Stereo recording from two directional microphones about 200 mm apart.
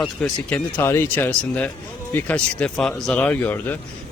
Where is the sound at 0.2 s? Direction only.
10° left (ahead or behind).